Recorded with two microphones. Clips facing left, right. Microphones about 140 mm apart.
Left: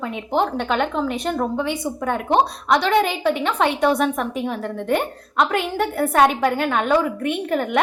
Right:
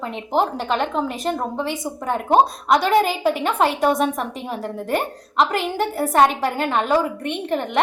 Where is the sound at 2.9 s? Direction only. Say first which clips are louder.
Right 1 dB; 40° right (ahead or behind).